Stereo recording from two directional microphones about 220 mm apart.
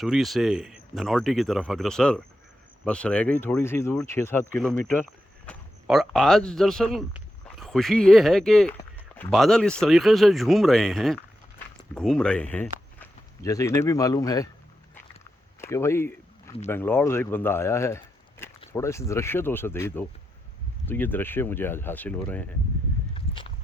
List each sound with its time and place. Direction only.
0.0 s speech: centre (ahead or behind)
8.8 s a sound: 10° left (ahead or behind)
9.3 s speech: centre (ahead or behind)
15.6 s speech: 10° left (ahead or behind)
23.1 s walk: 25° left (ahead or behind)